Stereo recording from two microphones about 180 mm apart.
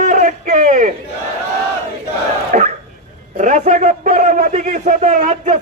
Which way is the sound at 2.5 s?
45° right (ahead or behind).